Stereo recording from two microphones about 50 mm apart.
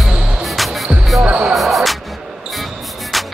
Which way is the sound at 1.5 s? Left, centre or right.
Centre.